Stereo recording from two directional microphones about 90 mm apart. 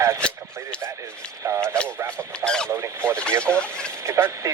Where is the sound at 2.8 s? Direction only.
25° right (ahead or behind).